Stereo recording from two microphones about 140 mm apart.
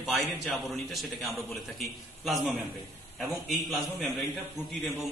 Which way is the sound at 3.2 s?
Centre (ahead or behind).